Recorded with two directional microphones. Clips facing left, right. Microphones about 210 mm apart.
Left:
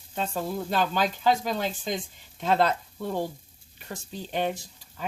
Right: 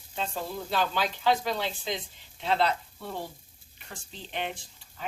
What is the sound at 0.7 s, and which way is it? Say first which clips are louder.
Speech: left 2 dB; 45° left (ahead or behind).